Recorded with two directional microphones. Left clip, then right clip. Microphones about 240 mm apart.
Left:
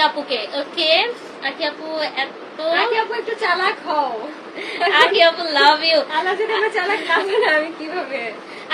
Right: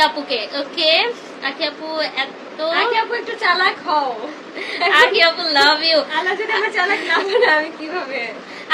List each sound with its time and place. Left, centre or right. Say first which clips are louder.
0.0 s a woman's voice: right 1 dB; centre